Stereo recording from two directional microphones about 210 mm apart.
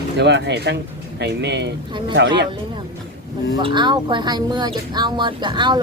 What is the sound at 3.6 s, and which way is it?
Speech, 20° right (ahead or behind).